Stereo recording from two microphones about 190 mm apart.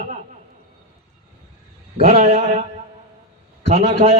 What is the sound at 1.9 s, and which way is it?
Speech, 35° right (ahead or behind).